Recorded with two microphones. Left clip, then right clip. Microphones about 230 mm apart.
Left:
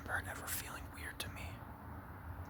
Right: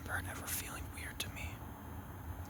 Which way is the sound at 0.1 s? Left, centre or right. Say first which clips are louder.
Even; centre.